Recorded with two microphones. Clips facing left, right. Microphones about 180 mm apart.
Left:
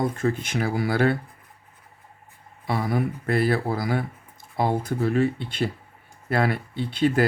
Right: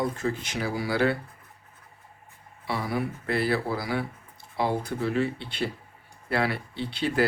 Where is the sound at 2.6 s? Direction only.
50° left (ahead or behind).